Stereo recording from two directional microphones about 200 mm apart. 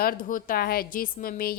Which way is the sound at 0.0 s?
45° left (ahead or behind).